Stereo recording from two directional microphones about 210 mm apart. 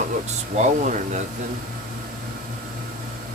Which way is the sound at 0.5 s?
35° right (ahead or behind).